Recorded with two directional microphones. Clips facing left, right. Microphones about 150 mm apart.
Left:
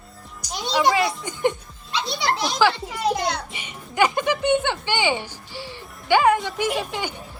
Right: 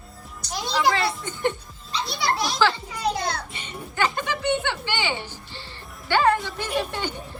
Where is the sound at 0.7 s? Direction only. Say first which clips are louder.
Left 3 dB; 15° left (ahead or behind).